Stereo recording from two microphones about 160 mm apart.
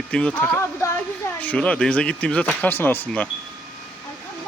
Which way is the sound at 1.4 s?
10° left (ahead or behind).